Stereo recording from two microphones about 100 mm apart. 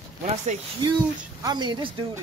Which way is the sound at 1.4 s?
50° right (ahead or behind).